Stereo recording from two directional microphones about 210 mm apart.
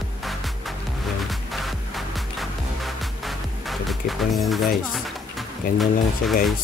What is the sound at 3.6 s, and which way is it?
Music, centre (ahead or behind).